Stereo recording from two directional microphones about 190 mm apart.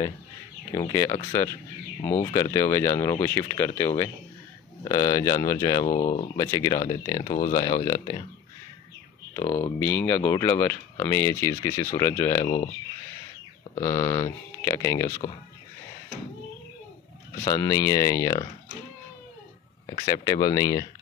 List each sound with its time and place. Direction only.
0.7 s speech: 20° left (ahead or behind)
9.3 s speech: 15° left (ahead or behind)
13.7 s speech: 15° left (ahead or behind)
17.5 s speech: 20° left (ahead or behind)
20.1 s speech: 20° left (ahead or behind)